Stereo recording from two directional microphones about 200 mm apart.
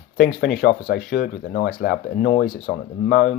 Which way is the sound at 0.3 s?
45° left (ahead or behind).